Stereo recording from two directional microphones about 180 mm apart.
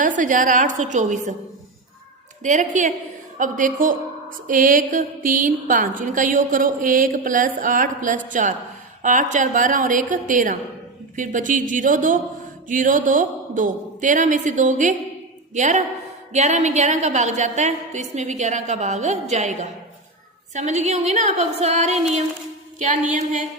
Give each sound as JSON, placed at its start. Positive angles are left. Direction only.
{"t": 0.0, "sound": "a woman's voice", "side_deg": -45}
{"t": 2.4, "sound": "a woman's voice", "side_deg": -45}